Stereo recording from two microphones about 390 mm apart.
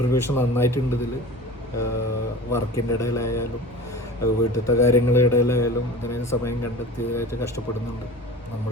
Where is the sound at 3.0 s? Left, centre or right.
Centre.